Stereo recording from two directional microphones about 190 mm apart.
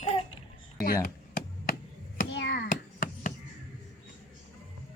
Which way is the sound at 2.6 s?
45° left (ahead or behind).